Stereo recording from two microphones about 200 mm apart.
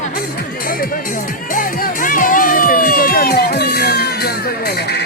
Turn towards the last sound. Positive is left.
turn(degrees=50)  # may be behind; listen again after turning